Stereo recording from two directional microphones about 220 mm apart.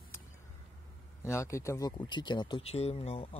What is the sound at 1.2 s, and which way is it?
Speech, 15° left (ahead or behind).